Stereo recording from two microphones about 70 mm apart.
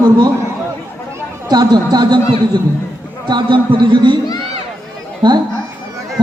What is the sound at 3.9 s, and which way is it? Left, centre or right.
Speech, right.